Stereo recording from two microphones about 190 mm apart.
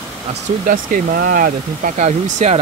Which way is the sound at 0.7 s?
50° right (ahead or behind).